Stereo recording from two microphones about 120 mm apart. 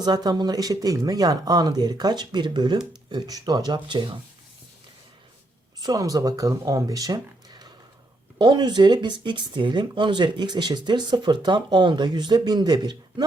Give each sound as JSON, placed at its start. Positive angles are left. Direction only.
{"t": 0.0, "sound": "speech", "side_deg": -35}
{"t": 5.8, "sound": "speech", "side_deg": -30}